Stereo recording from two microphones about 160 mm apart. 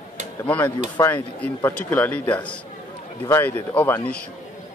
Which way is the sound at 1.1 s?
15° left (ahead or behind).